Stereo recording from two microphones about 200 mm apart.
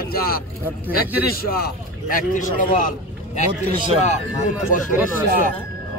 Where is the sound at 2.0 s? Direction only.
40° left (ahead or behind).